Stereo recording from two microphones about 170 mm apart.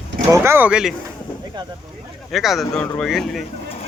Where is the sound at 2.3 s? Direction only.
Centre (ahead or behind).